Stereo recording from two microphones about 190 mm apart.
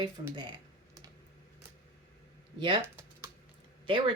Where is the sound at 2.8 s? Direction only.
15° right (ahead or behind).